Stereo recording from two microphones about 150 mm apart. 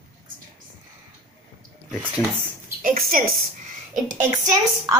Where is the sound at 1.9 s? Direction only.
5° right (ahead or behind).